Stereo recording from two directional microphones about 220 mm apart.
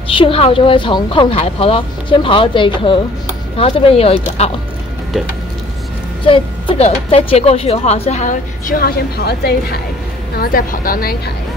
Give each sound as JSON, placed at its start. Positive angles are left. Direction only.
{"t": 0.1, "sound": "speech", "side_deg": 25}
{"t": 6.2, "sound": "speech", "side_deg": 25}